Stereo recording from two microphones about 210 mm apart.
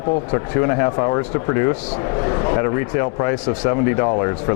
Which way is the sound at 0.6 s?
20° left (ahead or behind).